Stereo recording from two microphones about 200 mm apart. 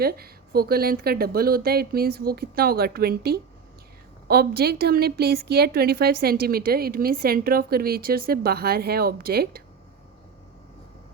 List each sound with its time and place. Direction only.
0.0 s a woman's voice: 50° right (ahead or behind)